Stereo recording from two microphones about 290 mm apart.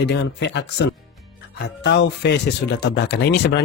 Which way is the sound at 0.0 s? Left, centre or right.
Left.